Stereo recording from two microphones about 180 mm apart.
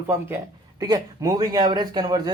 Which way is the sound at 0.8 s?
20° right (ahead or behind).